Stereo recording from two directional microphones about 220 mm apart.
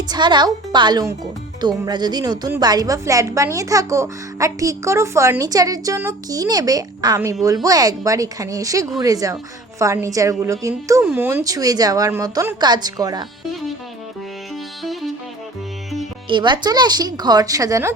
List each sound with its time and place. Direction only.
0.1 s a woman's voice: 20° right (ahead or behind)
16.3 s speech: 20° right (ahead or behind)